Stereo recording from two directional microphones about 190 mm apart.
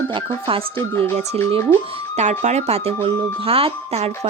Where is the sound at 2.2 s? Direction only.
35° right (ahead or behind).